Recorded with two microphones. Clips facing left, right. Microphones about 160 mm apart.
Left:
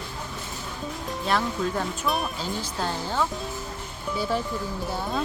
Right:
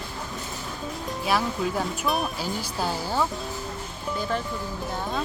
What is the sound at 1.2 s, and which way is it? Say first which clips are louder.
Speech: even; 5° right (ahead or behind).